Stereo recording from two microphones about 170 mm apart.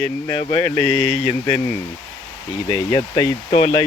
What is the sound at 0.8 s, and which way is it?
Speech, 40° right (ahead or behind).